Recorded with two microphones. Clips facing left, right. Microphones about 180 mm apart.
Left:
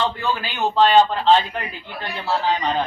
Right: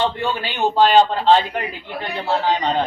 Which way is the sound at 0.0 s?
25° right (ahead or behind).